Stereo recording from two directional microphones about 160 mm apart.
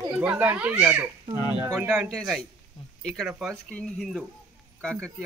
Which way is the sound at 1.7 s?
15° right (ahead or behind).